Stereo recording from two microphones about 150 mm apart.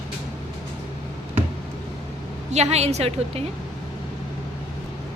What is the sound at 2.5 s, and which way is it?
Speech, 45° right (ahead or behind).